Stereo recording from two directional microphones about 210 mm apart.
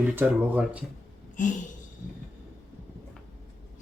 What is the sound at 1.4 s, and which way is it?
Speech, 35° left (ahead or behind).